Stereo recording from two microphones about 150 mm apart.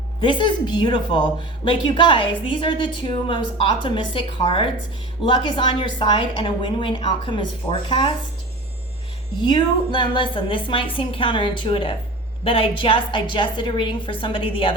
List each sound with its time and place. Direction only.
0.2 s speech: 35° left (ahead or behind)
9.4 s speech: 30° left (ahead or behind)